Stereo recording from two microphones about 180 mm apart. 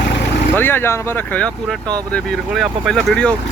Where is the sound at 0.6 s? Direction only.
10° left (ahead or behind).